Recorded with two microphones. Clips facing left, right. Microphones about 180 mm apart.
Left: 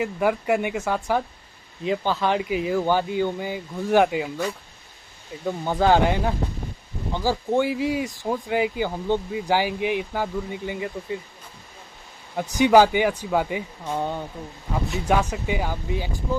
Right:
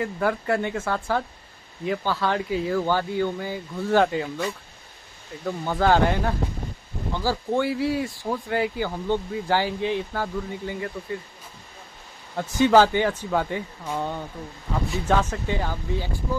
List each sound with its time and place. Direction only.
0.0 s speech: 15° left (ahead or behind)
12.5 s speech: 15° left (ahead or behind)